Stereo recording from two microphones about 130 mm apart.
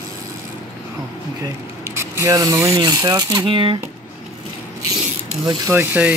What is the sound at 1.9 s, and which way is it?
Speech, 20° right (ahead or behind).